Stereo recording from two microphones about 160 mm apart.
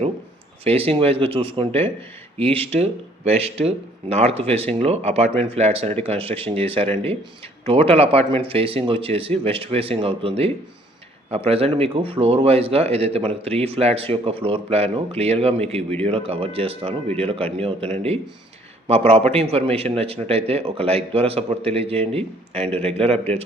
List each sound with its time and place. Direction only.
0.6 s a man's voice: 40° right (ahead or behind)